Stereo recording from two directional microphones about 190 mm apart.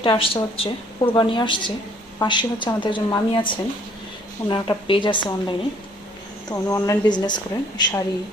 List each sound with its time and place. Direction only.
0.0 s a woman's voice: 30° left (ahead or behind)